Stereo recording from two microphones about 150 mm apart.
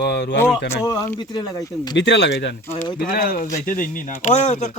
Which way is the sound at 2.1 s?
90° left.